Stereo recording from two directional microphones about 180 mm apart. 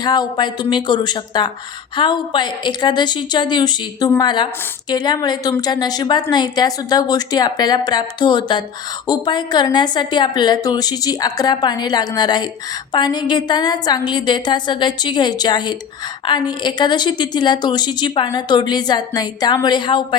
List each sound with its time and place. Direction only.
0.0 s a woman's voice: 25° left (ahead or behind)